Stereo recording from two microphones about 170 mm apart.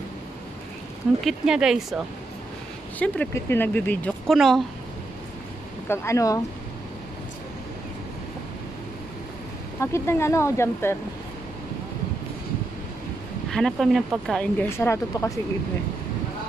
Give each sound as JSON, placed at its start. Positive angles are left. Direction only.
{"t": 1.2, "sound": "speech", "side_deg": -5}
{"t": 3.0, "sound": "speech", "side_deg": 10}
{"t": 5.9, "sound": "speech", "side_deg": 15}
{"t": 9.8, "sound": "speech", "side_deg": 15}
{"t": 13.5, "sound": "speech", "side_deg": 0}